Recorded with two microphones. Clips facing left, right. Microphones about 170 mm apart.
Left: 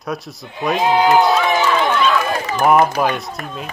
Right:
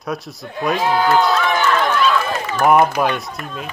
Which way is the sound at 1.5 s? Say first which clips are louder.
Left 1 dB; 5° left (ahead or behind).